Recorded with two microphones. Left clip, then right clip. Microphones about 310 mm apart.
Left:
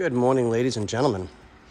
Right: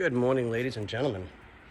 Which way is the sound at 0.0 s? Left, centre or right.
Centre.